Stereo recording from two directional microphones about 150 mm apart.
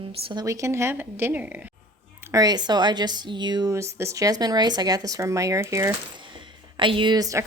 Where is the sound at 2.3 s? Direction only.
25° right (ahead or behind).